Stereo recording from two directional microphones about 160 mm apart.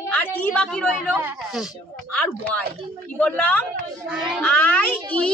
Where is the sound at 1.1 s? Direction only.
15° right (ahead or behind).